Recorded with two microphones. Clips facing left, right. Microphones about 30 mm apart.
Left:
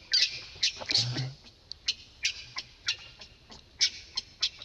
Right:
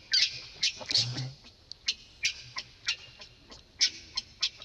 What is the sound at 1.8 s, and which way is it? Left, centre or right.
Fowl, centre.